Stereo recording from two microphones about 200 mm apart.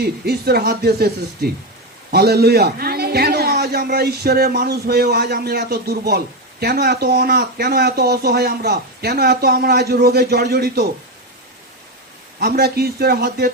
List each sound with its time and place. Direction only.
0.0 s a man's voice: 50° right (ahead or behind)
12.4 s a man's voice: 50° right (ahead or behind)